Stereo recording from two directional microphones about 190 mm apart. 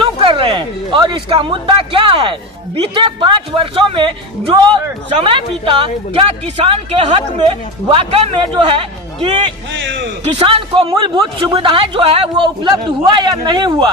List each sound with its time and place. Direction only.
0.0 s a man's voice: 25° right (ahead or behind)
9.7 s a man's voice: 70° right (ahead or behind)
10.3 s a man's voice: 30° right (ahead or behind)